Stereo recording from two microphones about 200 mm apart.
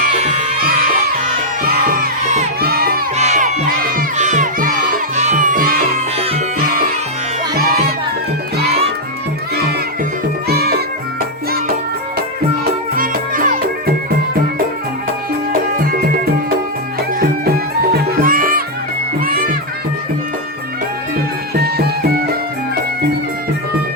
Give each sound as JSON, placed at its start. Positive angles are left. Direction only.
{"t": 0.0, "sound": "music", "side_deg": -35}
{"t": 1.2, "sound": "music", "side_deg": -45}
{"t": 2.6, "sound": "crowd", "side_deg": -50}
{"t": 3.2, "sound": "crowd", "side_deg": -35}
{"t": 6.1, "sound": "music", "side_deg": -30}
{"t": 7.5, "sound": "music", "side_deg": -50}
{"t": 10.5, "sound": "music", "side_deg": -50}
{"t": 13.0, "sound": "music", "side_deg": -45}
{"t": 15.8, "sound": "music", "side_deg": -45}
{"t": 21.5, "sound": "music", "side_deg": -50}